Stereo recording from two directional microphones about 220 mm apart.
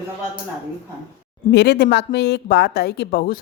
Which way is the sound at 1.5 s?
50° left (ahead or behind).